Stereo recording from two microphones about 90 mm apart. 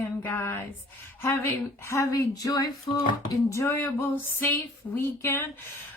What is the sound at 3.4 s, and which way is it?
A woman's voice, 30° left (ahead or behind).